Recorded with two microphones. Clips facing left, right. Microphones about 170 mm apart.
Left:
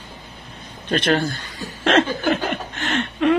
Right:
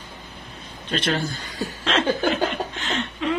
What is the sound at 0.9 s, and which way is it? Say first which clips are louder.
Speech: left 5 dB; 55° left (ahead or behind).